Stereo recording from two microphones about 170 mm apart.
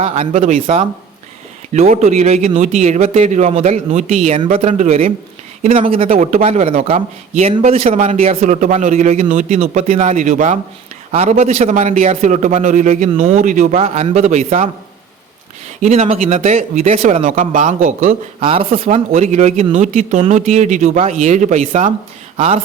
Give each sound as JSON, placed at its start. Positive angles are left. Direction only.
{"t": 0.0, "sound": "a man's voice", "side_deg": -40}
{"t": 10.2, "sound": "a man's voice", "side_deg": -50}
{"t": 15.8, "sound": "a man's voice", "side_deg": -40}
{"t": 18.3, "sound": "a man's voice", "side_deg": -30}